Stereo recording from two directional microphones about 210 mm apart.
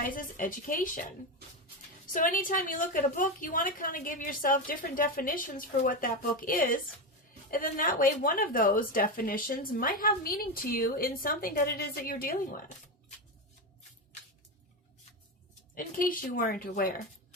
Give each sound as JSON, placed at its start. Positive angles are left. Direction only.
{"t": 0.0, "sound": "a woman's voice", "side_deg": 40}
{"t": 2.1, "sound": "a woman's voice", "side_deg": 40}
{"t": 15.7, "sound": "a woman's voice", "side_deg": 40}